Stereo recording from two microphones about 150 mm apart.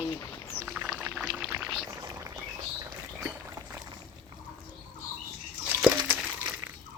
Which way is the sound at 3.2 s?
15° right (ahead or behind).